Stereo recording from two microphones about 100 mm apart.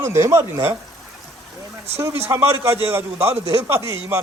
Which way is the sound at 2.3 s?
25° right (ahead or behind).